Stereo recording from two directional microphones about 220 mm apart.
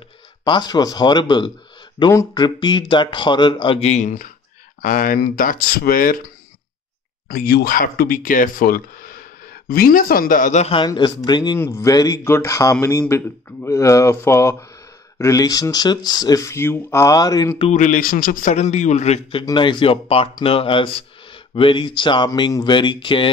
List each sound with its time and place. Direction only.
0.5 s speech: 20° left (ahead or behind); by 6.1 s 40° left (ahead or behind)
7.2 s speech: 45° left (ahead or behind); by 17.6 s 15° left (ahead or behind)
17.6 s speech: 35° left (ahead or behind)